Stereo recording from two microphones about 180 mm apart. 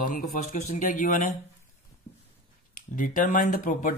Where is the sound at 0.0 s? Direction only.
45° left (ahead or behind).